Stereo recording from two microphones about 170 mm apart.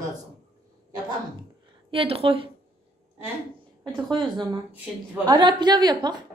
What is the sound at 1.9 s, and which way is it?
Speech, 35° right (ahead or behind).